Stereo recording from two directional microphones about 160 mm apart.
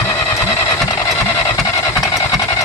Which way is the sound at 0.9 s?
20° left (ahead or behind).